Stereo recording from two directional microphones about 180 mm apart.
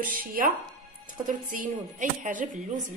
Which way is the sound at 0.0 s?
50° right (ahead or behind).